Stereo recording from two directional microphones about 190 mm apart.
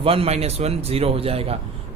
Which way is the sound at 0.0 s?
30° right (ahead or behind).